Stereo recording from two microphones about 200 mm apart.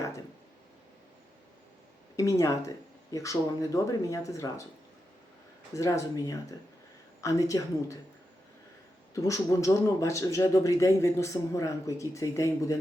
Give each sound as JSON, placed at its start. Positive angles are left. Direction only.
{"t": 2.1, "sound": "speech", "side_deg": 15}
{"t": 5.7, "sound": "speech", "side_deg": 15}
{"t": 9.2, "sound": "speech", "side_deg": 15}